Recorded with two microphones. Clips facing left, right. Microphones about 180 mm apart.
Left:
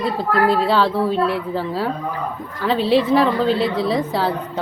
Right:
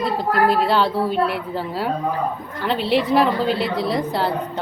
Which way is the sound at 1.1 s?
30° left (ahead or behind).